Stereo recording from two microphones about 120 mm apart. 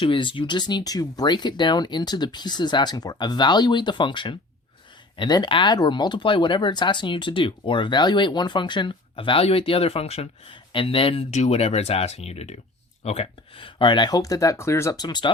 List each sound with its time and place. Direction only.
0.0 s speech: 45° left (ahead or behind)
11.3 s speech: 70° left (ahead or behind); by 15.3 s 35° left (ahead or behind)